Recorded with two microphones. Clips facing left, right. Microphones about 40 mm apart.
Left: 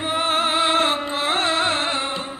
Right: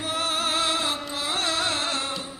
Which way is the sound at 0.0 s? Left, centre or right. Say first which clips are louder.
Left 6 dB; left.